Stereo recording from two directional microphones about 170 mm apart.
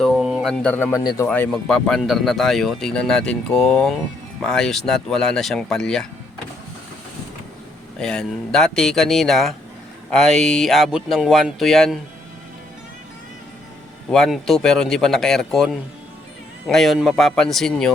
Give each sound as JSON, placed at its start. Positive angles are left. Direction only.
{"t": 0.0, "sound": "a sound", "side_deg": 0}
{"t": 1.0, "sound": "speech", "side_deg": 20}
{"t": 1.3, "sound": "speech", "side_deg": 5}
{"t": 7.9, "sound": "speech", "side_deg": 5}
{"t": 14.1, "sound": "speech", "side_deg": 0}